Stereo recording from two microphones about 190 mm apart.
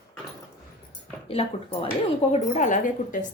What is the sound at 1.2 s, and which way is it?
A woman's voice, 30° left (ahead or behind).